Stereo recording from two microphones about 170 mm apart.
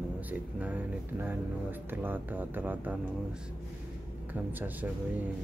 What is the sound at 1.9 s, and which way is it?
Speech, 10° right (ahead or behind).